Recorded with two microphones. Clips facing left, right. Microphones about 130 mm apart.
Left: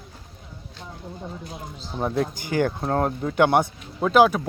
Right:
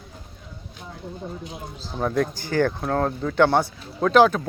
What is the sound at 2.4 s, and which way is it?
Speech, 15° left (ahead or behind).